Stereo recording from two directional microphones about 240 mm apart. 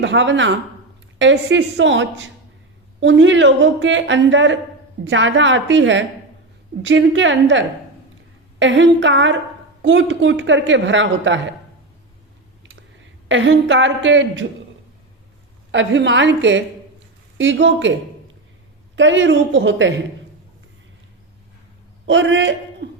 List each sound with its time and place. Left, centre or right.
0.0 s speech: right
13.2 s speech: right
15.7 s speech: right
18.9 s speech: right
22.0 s speech: right
22.8 s a sound: right